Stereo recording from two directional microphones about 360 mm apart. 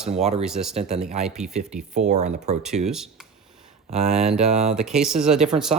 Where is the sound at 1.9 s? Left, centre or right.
Centre.